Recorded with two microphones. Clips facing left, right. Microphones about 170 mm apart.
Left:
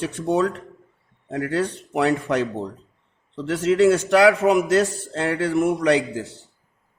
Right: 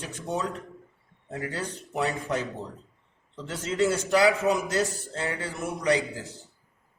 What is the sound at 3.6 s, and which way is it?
A man's voice, 75° left (ahead or behind).